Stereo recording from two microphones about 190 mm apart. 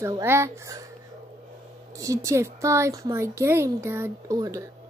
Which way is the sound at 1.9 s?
15° right (ahead or behind).